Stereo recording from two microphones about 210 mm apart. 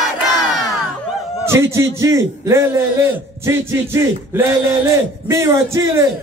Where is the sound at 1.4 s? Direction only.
10° right (ahead or behind).